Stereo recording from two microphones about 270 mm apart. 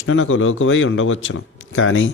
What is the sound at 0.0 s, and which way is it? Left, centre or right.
Speech, left.